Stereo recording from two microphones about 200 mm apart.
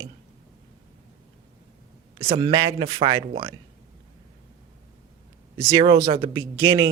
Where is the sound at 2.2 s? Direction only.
25° right (ahead or behind).